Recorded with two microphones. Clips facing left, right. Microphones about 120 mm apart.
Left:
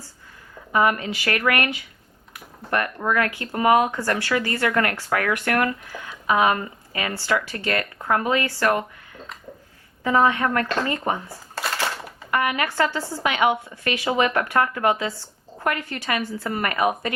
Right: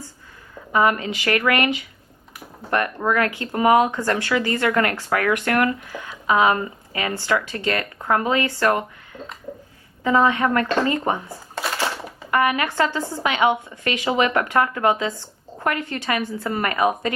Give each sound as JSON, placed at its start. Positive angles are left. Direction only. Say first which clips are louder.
{"t": 0.7, "sound": "a woman's voice", "louder": "right 1 dB", "side_deg": -25}
{"t": 10.0, "sound": "a woman's voice", "louder": "right 1 dB", "side_deg": -20}
{"t": 11.5, "sound": "a sound", "louder": "right 2 dB", "side_deg": 0}
{"t": 12.3, "sound": "a woman's voice", "louder": "right 3 dB", "side_deg": -25}